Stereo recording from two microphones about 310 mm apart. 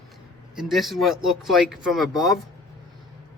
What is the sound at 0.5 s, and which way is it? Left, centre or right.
Speech, centre.